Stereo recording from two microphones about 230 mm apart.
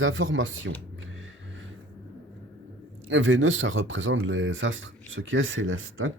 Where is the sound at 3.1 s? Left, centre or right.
Right.